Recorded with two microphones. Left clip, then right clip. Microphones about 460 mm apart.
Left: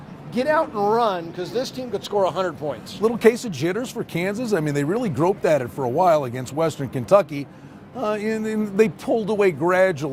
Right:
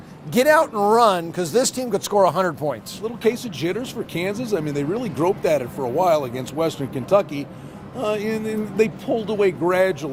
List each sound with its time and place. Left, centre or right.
0.3 s speech: right
3.0 s speech: left